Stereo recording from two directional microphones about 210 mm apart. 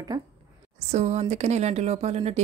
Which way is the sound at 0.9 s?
30° right (ahead or behind).